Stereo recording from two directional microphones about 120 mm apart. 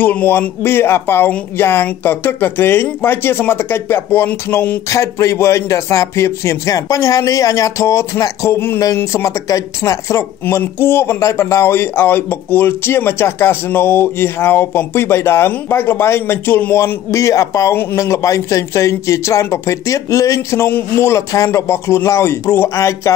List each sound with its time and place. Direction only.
0.0 s speech: 15° left (ahead or behind)